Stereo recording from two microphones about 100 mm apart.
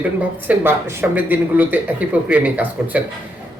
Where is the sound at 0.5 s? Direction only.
15° right (ahead or behind).